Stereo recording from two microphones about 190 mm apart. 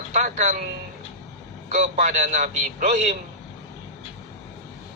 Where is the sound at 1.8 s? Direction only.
35° right (ahead or behind).